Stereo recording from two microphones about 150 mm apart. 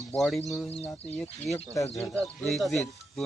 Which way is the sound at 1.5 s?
Centre (ahead or behind).